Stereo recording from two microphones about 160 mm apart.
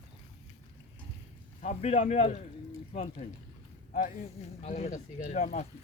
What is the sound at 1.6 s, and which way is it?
Speech, 45° left (ahead or behind).